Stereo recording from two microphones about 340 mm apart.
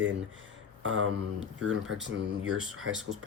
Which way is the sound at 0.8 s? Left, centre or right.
Right.